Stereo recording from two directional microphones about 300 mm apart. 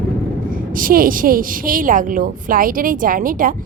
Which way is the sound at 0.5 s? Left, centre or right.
Right.